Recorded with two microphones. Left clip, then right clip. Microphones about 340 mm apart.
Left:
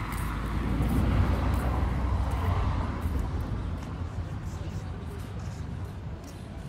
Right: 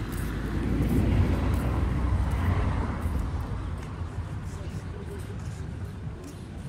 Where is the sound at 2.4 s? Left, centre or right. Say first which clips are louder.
Right 1 dB; centre.